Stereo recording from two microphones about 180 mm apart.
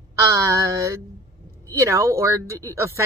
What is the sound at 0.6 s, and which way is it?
Speech, 15° right (ahead or behind).